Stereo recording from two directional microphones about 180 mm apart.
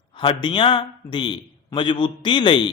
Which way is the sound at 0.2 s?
25° left (ahead or behind).